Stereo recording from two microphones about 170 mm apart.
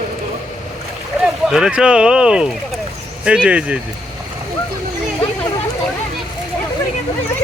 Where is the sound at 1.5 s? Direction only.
5° right (ahead or behind).